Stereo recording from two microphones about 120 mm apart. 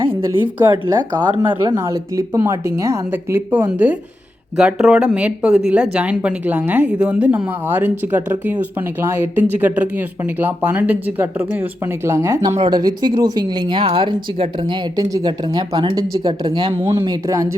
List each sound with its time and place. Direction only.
0.7 s speech: 40° right (ahead or behind)
1.4 s a woman's voice: 25° right (ahead or behind)
13.8 s speech: 50° right (ahead or behind)
16.5 s speech: 55° right (ahead or behind)
17.1 s a woman's voice: 25° right (ahead or behind)